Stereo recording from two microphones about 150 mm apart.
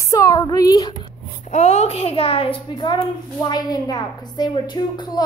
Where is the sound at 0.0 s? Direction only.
20° left (ahead or behind).